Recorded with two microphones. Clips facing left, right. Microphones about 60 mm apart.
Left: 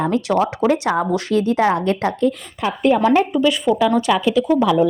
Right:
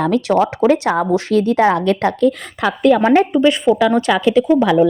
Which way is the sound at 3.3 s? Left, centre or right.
Right.